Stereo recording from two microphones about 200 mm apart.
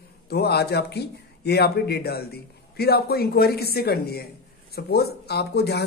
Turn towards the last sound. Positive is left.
turn(degrees=55)  # may be behind; listen again after turning